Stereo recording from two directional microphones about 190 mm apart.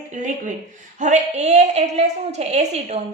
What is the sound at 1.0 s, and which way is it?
A woman's voice, 40° right (ahead or behind).